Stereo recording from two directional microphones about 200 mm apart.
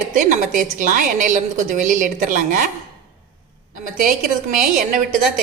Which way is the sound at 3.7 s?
40° right (ahead or behind).